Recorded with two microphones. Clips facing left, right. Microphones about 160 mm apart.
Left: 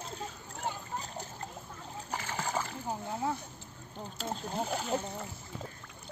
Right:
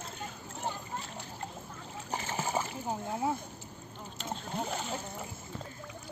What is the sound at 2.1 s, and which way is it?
Splash, 20° right (ahead or behind).